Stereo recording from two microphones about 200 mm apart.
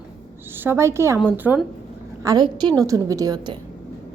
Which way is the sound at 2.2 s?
20° right (ahead or behind).